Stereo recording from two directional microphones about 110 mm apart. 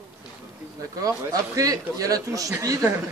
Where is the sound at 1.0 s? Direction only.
30° right (ahead or behind).